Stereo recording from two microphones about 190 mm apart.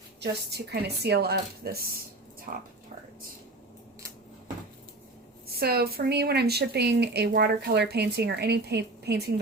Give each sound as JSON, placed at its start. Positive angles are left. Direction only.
{"t": 0.2, "sound": "a woman's voice", "side_deg": -60}
{"t": 2.5, "sound": "speech", "side_deg": -40}
{"t": 5.5, "sound": "a woman's voice", "side_deg": -55}